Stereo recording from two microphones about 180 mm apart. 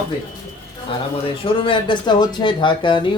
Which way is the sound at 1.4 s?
30° left (ahead or behind).